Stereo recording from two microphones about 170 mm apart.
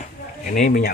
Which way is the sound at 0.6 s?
60° left (ahead or behind).